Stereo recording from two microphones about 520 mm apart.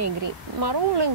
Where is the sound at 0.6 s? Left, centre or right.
Right.